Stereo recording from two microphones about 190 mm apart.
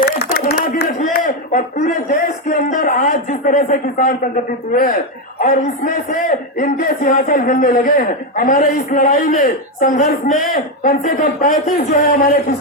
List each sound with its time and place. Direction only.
0.2 s a sound: 55° left (ahead or behind)
2.6 s a man's voice: 45° left (ahead or behind)
12.1 s speech: 55° left (ahead or behind)